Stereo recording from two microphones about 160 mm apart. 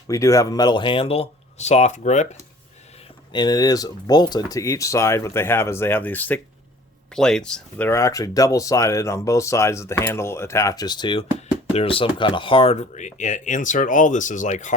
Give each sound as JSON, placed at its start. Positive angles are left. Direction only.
{"t": 0.1, "sound": "speech", "side_deg": 20}
{"t": 3.3, "sound": "speech", "side_deg": 25}
{"t": 7.9, "sound": "speech", "side_deg": 20}